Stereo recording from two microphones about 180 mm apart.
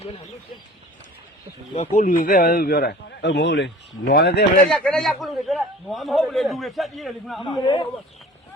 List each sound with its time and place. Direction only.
1.8 s a man's voice: 45° left (ahead or behind); by 3.7 s 75° left (ahead or behind)
4.0 s speech: 60° left (ahead or behind)
4.7 s a man's voice: 5° left (ahead or behind)
7.6 s speech: 25° left (ahead or behind)